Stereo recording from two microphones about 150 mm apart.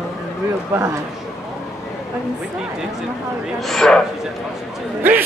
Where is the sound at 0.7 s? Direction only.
20° right (ahead or behind).